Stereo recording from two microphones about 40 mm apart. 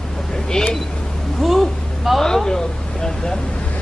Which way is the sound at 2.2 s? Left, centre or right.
Centre.